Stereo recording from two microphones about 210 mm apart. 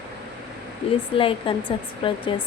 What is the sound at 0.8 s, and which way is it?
A woman's voice, 30° left (ahead or behind).